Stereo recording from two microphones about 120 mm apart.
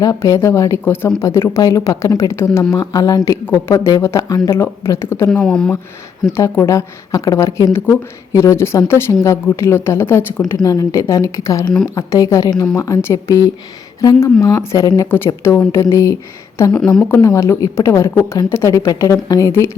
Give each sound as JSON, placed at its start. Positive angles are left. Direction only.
{"t": 0.0, "sound": "a woman's voice", "side_deg": 30}
{"t": 5.3, "sound": "speech", "side_deg": 5}
{"t": 6.3, "sound": "a woman's voice", "side_deg": 20}
{"t": 16.7, "sound": "a woman's voice", "side_deg": 5}
{"t": 17.2, "sound": "a woman's voice", "side_deg": 25}